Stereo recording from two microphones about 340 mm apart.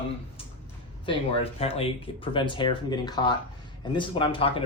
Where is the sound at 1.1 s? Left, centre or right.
Centre.